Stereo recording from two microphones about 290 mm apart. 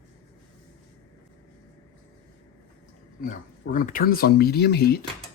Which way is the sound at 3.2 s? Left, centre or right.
Left.